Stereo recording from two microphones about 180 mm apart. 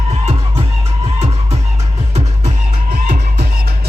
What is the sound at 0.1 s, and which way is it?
Music, 35° right (ahead or behind).